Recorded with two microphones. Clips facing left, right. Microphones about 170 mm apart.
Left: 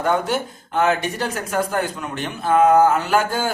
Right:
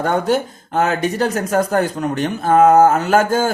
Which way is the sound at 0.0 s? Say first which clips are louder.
Right 3 dB; 40° right (ahead or behind).